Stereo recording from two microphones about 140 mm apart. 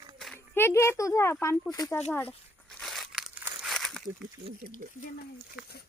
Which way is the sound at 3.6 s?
Centre (ahead or behind).